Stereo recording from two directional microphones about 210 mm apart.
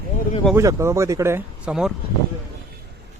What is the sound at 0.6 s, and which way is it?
Speech, 15° right (ahead or behind).